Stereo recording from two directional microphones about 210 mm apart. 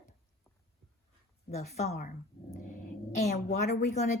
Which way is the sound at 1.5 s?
30° left (ahead or behind).